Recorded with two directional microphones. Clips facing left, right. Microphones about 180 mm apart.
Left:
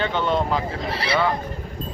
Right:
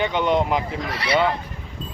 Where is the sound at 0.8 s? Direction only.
30° left (ahead or behind).